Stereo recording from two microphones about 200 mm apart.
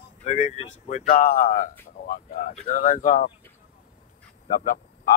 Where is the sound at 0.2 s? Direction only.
35° left (ahead or behind).